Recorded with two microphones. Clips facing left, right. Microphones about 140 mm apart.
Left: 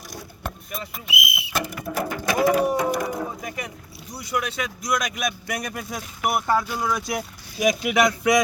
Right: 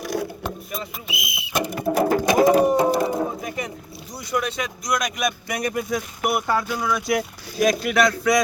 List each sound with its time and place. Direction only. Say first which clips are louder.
0.0 s vehicle: right 13 dB; 70° right (ahead or behind)
0.4 s whistle: right 3 dB; 5° left (ahead or behind)
1.4 s a sound: right 9 dB; 15° right (ahead or behind)
4.3 s speech: right 2 dB; 5° left (ahead or behind)
7.6 s speech: right 1 dB; 15° left (ahead or behind)